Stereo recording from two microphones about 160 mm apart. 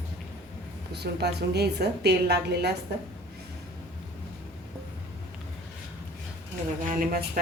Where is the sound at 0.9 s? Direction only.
90° right.